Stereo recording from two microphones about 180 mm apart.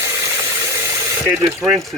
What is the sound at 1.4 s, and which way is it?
Speech, 15° right (ahead or behind).